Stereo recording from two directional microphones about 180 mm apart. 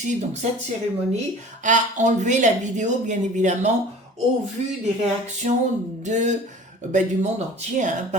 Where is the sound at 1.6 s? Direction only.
45° right (ahead or behind).